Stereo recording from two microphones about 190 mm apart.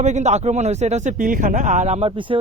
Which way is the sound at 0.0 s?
40° right (ahead or behind).